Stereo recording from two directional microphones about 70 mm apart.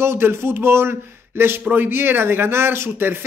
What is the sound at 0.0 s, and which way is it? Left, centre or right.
Speech, right.